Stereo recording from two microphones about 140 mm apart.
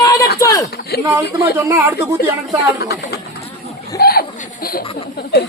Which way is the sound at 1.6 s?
20° right (ahead or behind).